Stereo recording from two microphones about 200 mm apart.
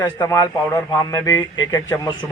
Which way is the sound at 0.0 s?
15° left (ahead or behind).